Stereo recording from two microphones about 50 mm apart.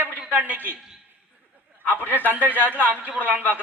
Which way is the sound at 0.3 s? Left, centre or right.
Right.